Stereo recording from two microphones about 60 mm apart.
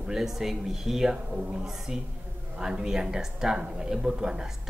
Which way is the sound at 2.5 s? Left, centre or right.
Centre.